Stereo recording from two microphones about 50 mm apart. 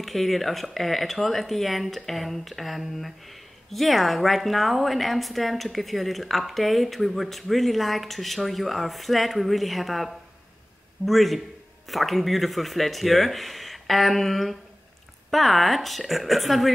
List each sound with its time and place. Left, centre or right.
0.0 s a woman's voice: centre